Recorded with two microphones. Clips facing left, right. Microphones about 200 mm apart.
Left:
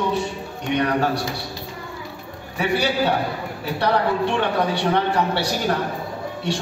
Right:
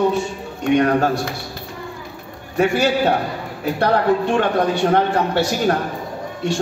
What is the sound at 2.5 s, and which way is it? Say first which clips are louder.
A man's voice: right 5 dB; 50° right (ahead or behind).